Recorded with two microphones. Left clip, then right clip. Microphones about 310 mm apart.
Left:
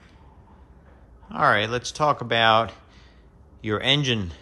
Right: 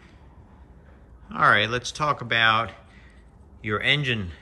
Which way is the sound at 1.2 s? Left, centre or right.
Centre.